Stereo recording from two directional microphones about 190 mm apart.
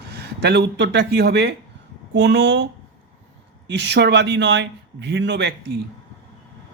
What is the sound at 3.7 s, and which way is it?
Speech, 65° right (ahead or behind).